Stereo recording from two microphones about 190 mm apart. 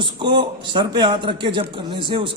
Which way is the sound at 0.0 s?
25° right (ahead or behind).